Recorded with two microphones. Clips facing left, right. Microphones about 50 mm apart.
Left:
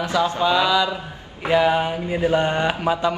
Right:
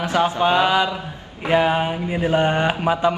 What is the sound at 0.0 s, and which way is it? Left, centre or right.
Speech, right.